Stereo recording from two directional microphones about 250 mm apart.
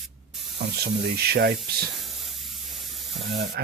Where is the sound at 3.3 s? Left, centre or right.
Right.